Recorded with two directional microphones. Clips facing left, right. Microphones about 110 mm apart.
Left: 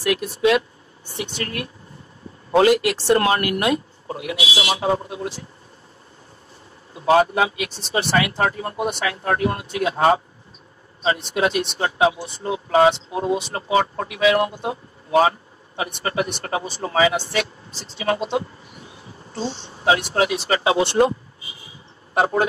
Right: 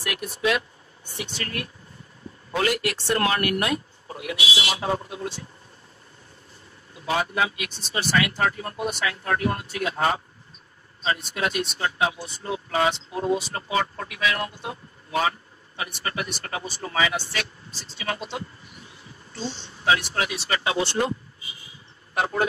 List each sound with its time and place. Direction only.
1.0 s vehicle: 25° left (ahead or behind)
1.4 s speech: 25° left (ahead or behind)
7.3 s speech: 25° left (ahead or behind)
22.1 s speech: 30° left (ahead or behind)